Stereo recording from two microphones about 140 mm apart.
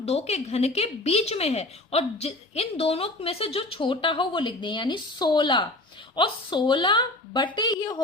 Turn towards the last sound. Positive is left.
turn(degrees=30)  # may be behind; listen again after turning